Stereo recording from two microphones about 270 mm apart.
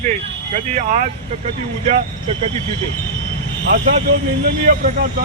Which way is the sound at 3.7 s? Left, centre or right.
Right.